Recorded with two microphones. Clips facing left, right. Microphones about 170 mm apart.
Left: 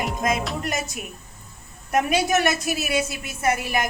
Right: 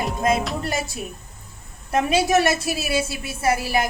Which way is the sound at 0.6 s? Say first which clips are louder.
Right 2 dB; 30° right (ahead or behind).